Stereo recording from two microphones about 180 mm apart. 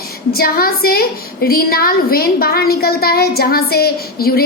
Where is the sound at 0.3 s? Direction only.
55° left (ahead or behind).